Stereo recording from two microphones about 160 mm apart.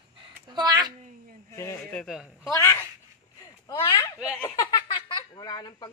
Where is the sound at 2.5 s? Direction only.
20° left (ahead or behind).